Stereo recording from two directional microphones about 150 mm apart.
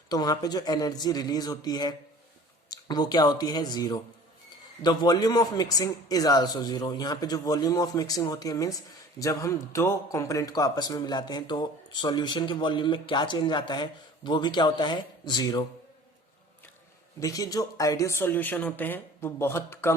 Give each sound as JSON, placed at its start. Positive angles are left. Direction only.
{"t": 0.1, "sound": "a man's voice", "side_deg": 25}
{"t": 17.2, "sound": "speech", "side_deg": 25}